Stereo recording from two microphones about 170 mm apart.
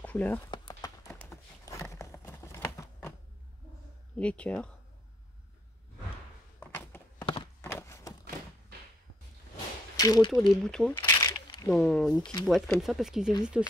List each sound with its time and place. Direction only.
0.0 s a sound: 10° left (ahead or behind)
0.5 s a sound: 25° left (ahead or behind)
4.2 s speech: 5° left (ahead or behind)
6.6 s walk: 15° left (ahead or behind)
9.9 s speech: 25° left (ahead or behind)
10.5 s speech: 5° left (ahead or behind)
11.0 s crumpling: 25° left (ahead or behind)
11.7 s speech: 5° left (ahead or behind)
12.1 s speech: 25° left (ahead or behind)
12.4 s speech: centre (ahead or behind)